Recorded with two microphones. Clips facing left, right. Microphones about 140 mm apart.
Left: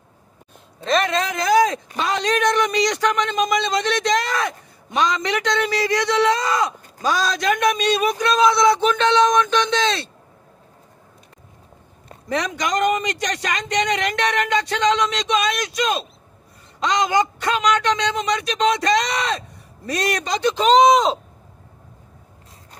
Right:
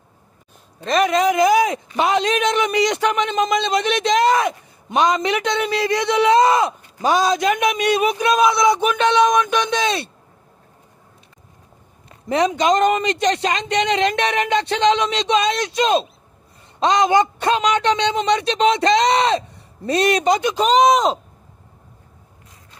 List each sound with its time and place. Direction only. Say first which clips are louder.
0.9 s a man's voice: right 5 dB; 10° right (ahead or behind)
12.3 s a man's voice: right 6 dB; 20° right (ahead or behind)
20.3 s speech: left 1 dB; 10° right (ahead or behind)